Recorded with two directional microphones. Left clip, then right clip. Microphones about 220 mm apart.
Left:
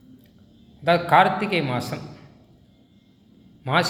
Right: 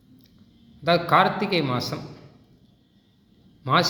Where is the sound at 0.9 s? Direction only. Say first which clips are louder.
Left 2 dB; 15° right (ahead or behind).